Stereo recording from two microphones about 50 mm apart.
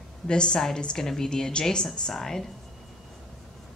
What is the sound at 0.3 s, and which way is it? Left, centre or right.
A woman's voice, centre.